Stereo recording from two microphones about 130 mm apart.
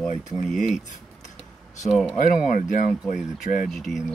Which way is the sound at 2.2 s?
90° left.